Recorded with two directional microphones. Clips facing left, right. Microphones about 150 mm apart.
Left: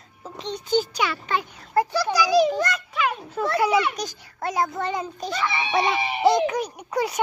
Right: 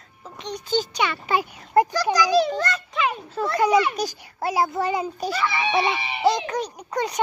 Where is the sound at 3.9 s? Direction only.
5° right (ahead or behind).